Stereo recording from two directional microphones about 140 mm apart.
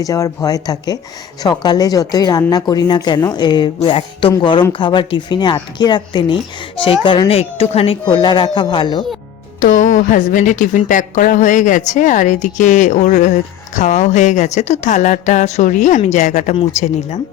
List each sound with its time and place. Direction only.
0.0 s a woman's voice: 25° left (ahead or behind); by 7.9 s 45° left (ahead or behind)
8.1 s speech: 35° left (ahead or behind)
9.6 s a woman's voice: 70° left (ahead or behind); by 17.2 s 50° left (ahead or behind)